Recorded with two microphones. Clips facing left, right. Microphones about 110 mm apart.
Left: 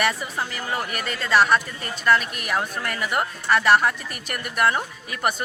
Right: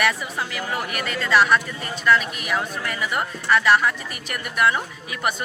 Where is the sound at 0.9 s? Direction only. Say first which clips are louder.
Right 1 dB; 35° left (ahead or behind).